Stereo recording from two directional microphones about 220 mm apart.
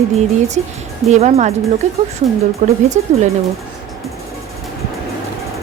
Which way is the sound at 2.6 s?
30° right (ahead or behind).